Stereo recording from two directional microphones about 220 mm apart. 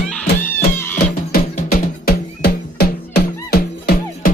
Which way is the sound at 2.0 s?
45° left (ahead or behind).